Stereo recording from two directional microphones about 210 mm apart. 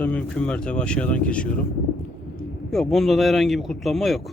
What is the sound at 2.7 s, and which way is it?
Speech, centre (ahead or behind).